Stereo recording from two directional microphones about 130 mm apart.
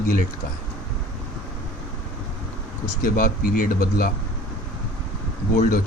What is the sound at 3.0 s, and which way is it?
Speech, 90° left.